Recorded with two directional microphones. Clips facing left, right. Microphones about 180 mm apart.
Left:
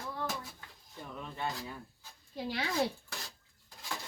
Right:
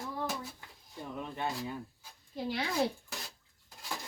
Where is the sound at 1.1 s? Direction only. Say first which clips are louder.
Right 2 dB; 20° right (ahead or behind).